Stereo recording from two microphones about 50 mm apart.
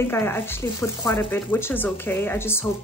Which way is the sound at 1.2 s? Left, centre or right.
Left.